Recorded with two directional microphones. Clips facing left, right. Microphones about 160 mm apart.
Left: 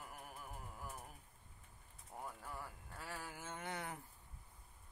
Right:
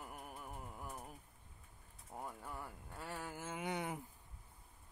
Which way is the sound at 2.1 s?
10° right (ahead or behind).